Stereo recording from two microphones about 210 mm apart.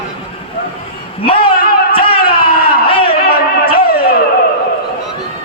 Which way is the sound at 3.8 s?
45° left (ahead or behind).